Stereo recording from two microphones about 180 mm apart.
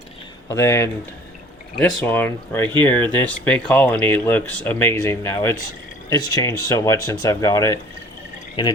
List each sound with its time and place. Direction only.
0.5 s speech: 15° left (ahead or behind)